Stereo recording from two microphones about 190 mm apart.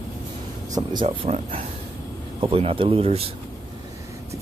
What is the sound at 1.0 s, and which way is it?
Speech, 30° right (ahead or behind).